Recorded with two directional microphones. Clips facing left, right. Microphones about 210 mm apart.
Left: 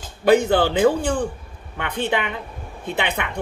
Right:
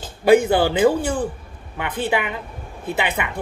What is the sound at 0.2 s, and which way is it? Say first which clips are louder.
Speech: right 1 dB; 10° right (ahead or behind).